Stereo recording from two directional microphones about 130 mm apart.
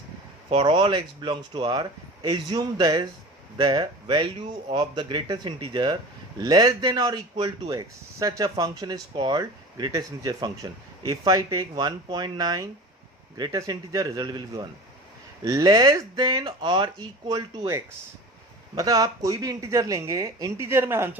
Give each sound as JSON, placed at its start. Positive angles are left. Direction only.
{"t": 0.6, "sound": "a man's voice", "side_deg": -40}